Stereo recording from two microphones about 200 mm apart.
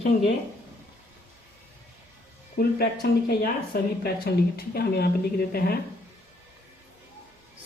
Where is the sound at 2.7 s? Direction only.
50° left (ahead or behind).